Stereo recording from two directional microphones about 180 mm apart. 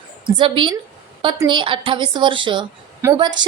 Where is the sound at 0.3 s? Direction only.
30° right (ahead or behind).